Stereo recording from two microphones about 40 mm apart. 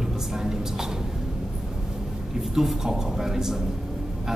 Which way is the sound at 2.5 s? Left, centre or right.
Centre.